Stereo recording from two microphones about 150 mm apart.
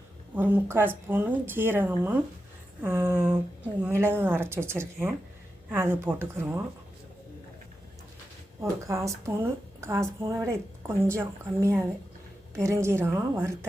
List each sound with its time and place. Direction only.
0.3 s speech: 15° right (ahead or behind)
8.8 s a woman's voice: 20° right (ahead or behind)